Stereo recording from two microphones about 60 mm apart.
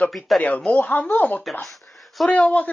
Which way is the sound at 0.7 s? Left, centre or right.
Left.